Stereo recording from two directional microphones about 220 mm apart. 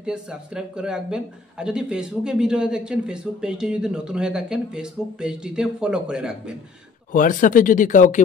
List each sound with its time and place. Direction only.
0.0 s speech: 5° right (ahead or behind)
7.1 s speech: 35° left (ahead or behind)